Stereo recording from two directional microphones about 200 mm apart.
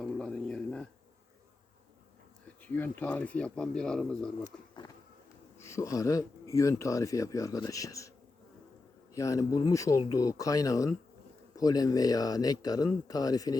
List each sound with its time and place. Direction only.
0.0 s a sound: 5° left (ahead or behind)
2.6 s speech: 10° left (ahead or behind)
5.5 s speech: 15° left (ahead or behind)
9.1 s speech: 15° left (ahead or behind)